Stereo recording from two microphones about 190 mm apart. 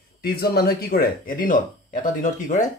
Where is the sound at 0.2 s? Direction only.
55° left (ahead or behind).